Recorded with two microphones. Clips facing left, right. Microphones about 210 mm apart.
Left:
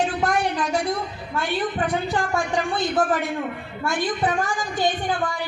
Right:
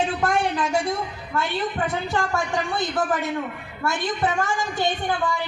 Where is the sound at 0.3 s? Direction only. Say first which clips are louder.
Even; 25° right (ahead or behind).